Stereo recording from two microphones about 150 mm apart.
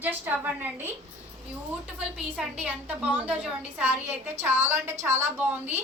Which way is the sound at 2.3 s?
10° right (ahead or behind).